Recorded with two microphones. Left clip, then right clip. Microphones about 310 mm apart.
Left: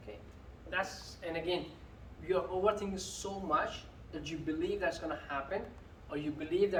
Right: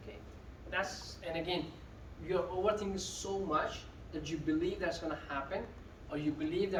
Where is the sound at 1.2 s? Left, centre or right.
Centre.